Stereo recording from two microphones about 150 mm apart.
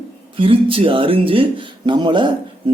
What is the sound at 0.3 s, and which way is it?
Speech, 35° right (ahead or behind).